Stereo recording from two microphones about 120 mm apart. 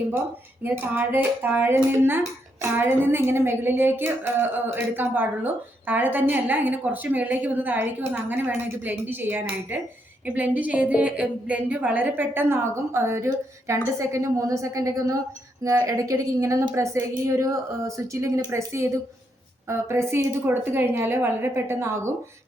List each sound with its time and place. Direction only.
0.6 s dishes: 15° right (ahead or behind)
15.6 s a woman's voice: 25° right (ahead or behind)